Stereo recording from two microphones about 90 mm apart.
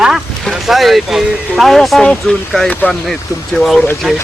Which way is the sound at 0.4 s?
Centre (ahead or behind).